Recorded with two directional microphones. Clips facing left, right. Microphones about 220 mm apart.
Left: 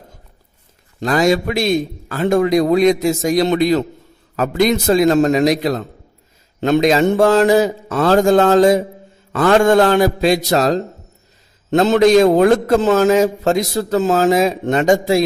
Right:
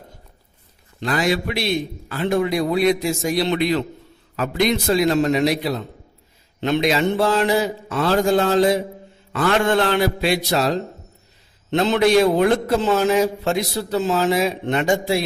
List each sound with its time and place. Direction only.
0.9 s a man's voice: 45° left (ahead or behind)